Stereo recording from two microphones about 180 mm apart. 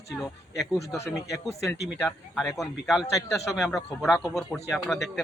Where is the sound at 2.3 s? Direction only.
Centre (ahead or behind).